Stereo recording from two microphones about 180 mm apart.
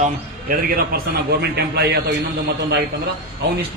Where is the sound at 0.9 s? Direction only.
60° right (ahead or behind).